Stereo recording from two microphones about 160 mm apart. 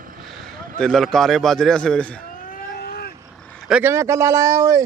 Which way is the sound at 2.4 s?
70° left (ahead or behind).